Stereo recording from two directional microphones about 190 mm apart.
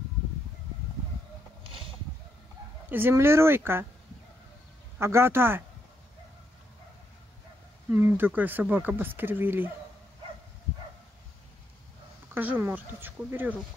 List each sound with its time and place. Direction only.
1.6 s a sound: 25° right (ahead or behind)
2.9 s speech: 10° right (ahead or behind)
4.9 s speech: 15° right (ahead or behind)
7.9 s speech: 15° right (ahead or behind)
12.4 s speech: 10° right (ahead or behind)